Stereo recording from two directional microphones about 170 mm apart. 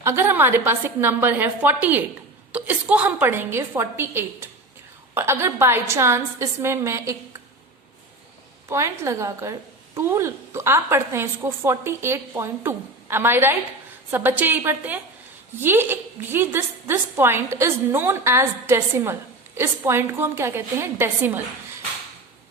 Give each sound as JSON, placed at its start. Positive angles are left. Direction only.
{"t": 0.0, "sound": "a woman's voice", "side_deg": -15}
{"t": 8.7, "sound": "a woman's voice", "side_deg": -15}